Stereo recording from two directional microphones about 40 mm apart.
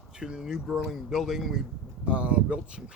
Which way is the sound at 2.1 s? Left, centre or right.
Right.